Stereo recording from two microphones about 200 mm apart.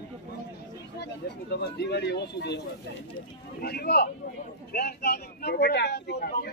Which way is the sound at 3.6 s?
55° left (ahead or behind).